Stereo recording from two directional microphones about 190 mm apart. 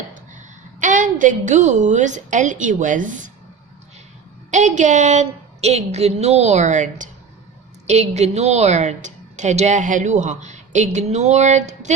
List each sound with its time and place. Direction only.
0.1 s a woman's voice: 40° right (ahead or behind)
4.5 s a woman's voice: 40° right (ahead or behind)